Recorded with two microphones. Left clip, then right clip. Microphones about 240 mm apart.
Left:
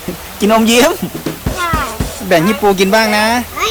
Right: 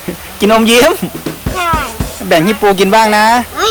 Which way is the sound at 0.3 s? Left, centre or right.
Centre.